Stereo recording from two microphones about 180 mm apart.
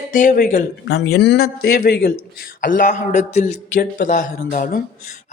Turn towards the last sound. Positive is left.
turn(degrees=45)  # may be behind; listen again after turning